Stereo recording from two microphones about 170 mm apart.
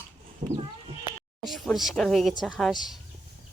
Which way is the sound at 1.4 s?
Centre (ahead or behind).